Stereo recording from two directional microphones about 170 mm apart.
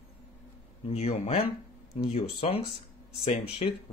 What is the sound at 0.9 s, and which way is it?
Speech, 35° left (ahead or behind).